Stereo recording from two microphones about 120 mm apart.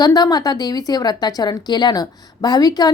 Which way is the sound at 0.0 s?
30° left (ahead or behind).